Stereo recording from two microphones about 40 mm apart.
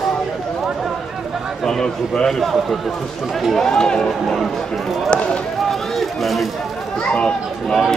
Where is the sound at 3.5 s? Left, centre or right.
Centre.